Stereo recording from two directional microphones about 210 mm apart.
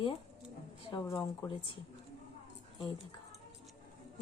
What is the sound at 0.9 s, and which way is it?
Speech, 15° left (ahead or behind).